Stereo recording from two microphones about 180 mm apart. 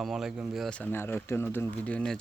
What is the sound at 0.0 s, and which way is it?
Speech, centre (ahead or behind).